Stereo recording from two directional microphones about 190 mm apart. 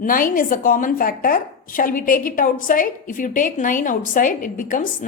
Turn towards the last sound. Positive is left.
turn(degrees=45)  # may be behind; listen again after turning